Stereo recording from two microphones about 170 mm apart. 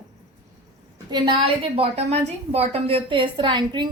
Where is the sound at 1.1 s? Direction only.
30° right (ahead or behind).